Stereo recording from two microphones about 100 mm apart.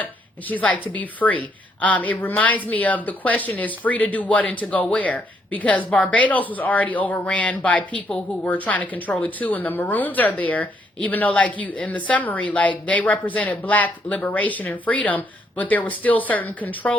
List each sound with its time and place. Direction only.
0.0 s speech: 15° left (ahead or behind)